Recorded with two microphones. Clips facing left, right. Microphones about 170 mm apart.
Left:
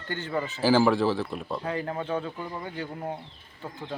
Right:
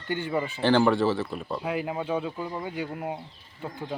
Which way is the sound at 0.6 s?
5° left (ahead or behind).